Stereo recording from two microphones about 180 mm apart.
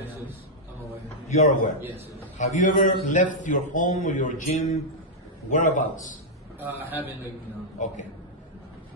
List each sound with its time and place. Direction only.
1.3 s a man's voice: 40° left (ahead or behind)
1.8 s a man's voice: 10° right (ahead or behind)
2.3 s speech: 40° left (ahead or behind)
6.6 s a man's voice: 10° right (ahead or behind)
7.8 s speech: 40° left (ahead or behind)